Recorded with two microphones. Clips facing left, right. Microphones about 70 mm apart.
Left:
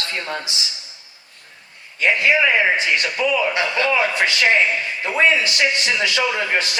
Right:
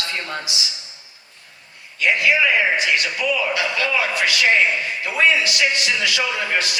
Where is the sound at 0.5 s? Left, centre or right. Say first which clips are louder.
Right 1 dB; left.